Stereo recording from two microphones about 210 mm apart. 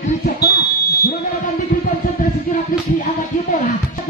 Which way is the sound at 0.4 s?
50° left (ahead or behind).